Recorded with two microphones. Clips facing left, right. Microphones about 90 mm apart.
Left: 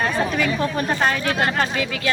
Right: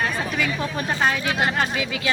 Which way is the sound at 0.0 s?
Centre (ahead or behind).